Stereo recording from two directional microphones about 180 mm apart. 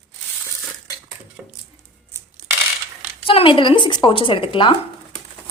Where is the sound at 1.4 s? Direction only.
5° right (ahead or behind).